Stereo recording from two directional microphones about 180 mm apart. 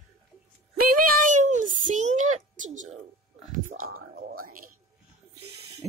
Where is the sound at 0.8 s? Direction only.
50° right (ahead or behind).